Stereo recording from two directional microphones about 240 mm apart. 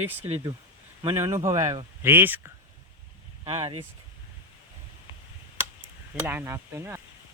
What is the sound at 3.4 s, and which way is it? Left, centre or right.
Speech, centre.